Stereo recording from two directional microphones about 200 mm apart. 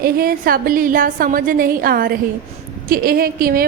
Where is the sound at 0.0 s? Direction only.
45° right (ahead or behind).